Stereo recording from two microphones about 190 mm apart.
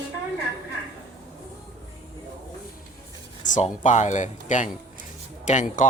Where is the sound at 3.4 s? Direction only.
40° left (ahead or behind).